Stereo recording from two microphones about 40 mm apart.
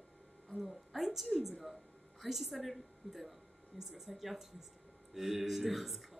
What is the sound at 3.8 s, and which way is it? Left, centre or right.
Speech, centre.